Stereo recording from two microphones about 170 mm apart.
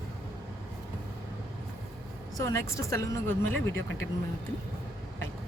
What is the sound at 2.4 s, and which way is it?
Speech, 20° left (ahead or behind).